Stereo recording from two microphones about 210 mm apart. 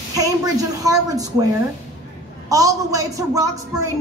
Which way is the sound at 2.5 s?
15° right (ahead or behind).